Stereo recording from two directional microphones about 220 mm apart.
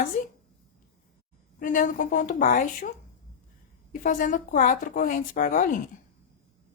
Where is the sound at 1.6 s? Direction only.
35° left (ahead or behind).